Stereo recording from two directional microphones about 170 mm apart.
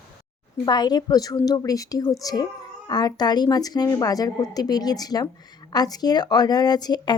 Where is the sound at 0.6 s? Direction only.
25° left (ahead or behind).